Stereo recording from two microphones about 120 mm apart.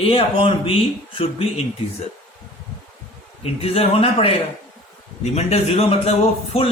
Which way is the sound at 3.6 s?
55° left (ahead or behind).